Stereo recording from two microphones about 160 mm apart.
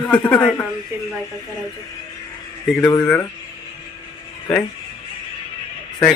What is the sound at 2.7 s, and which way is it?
Speech, 10° left (ahead or behind).